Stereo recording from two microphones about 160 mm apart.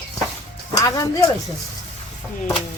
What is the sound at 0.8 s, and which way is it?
Speech, 20° left (ahead or behind).